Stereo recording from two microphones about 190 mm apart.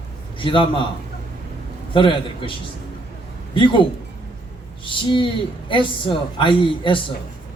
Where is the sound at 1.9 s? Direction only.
25° left (ahead or behind).